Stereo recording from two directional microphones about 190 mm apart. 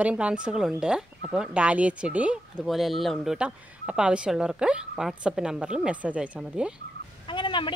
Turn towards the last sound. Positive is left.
turn(degrees=25)  # may be behind; listen again after turning